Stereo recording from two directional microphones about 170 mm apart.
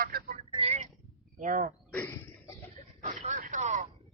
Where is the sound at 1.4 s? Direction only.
50° right (ahead or behind).